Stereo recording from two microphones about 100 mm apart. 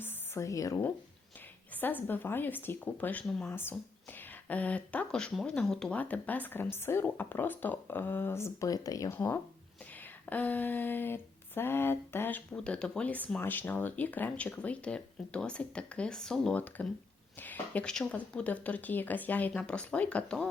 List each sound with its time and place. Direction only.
0.0 s a sound: 30° left (ahead or behind)
1.7 s speech: 20° left (ahead or behind); by 9.0 s 35° left (ahead or behind)
9.0 s speech: 25° left (ahead or behind)
12.5 s speech: 10° left (ahead or behind)
16.8 s speech: 15° left (ahead or behind)